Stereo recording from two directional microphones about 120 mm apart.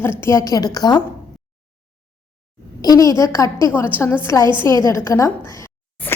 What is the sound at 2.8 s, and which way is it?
A woman's voice, 30° left (ahead or behind).